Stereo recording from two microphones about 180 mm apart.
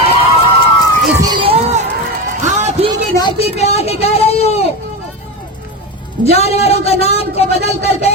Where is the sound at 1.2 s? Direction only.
25° right (ahead or behind).